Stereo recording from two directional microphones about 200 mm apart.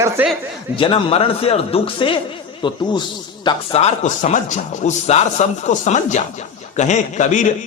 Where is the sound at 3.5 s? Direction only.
30° left (ahead or behind).